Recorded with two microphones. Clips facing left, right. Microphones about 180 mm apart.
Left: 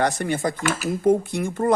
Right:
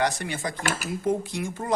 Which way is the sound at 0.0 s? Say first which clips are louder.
Left 5 dB; 50° left (ahead or behind).